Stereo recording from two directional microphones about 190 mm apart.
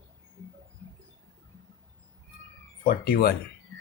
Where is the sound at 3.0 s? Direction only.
55° left (ahead or behind).